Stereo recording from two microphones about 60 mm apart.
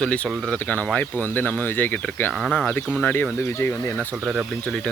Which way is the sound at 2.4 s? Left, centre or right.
Centre.